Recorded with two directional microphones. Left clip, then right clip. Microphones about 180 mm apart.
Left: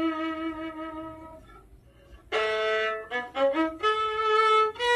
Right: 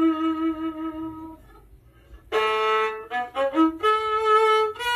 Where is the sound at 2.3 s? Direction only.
25° right (ahead or behind).